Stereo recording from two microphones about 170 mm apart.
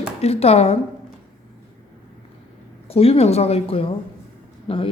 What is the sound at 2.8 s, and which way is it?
A woman's voice, 35° left (ahead or behind).